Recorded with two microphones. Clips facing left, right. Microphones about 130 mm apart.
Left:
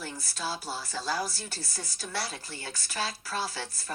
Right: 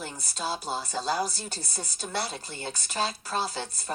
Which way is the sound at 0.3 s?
20° right (ahead or behind).